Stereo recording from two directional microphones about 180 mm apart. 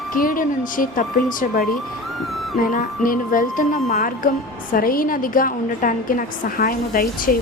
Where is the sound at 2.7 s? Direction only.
50° left (ahead or behind).